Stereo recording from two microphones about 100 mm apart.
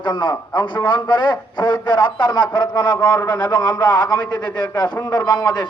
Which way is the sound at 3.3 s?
45° left (ahead or behind).